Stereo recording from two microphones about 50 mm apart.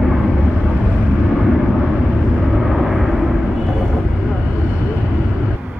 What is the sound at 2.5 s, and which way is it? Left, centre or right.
Vehicle, centre.